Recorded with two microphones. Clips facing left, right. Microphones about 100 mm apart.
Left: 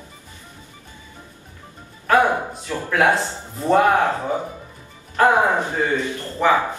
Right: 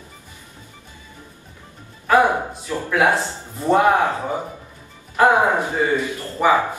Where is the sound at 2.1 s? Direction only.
5° right (ahead or behind).